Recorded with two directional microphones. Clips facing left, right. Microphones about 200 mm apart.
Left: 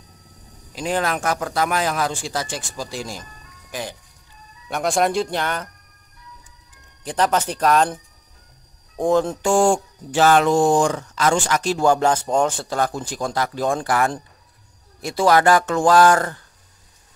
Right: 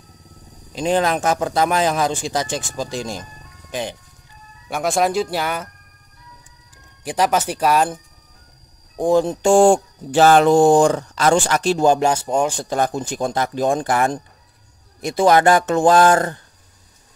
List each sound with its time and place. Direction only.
0.7 s speech: 25° right (ahead or behind)
4.6 s speech: centre (ahead or behind)
7.1 s speech: 10° right (ahead or behind)
9.4 s speech: 30° right (ahead or behind)